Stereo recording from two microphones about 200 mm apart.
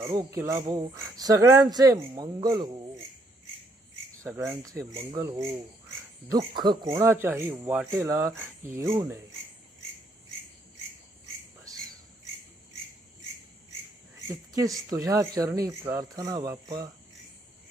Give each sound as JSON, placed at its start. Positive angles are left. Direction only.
{"t": 0.1, "sound": "speech", "side_deg": -15}
{"t": 4.2, "sound": "speech", "side_deg": -10}
{"t": 14.5, "sound": "speech", "side_deg": -15}